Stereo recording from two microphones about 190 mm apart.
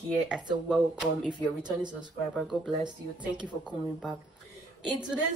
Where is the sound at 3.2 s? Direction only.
5° right (ahead or behind).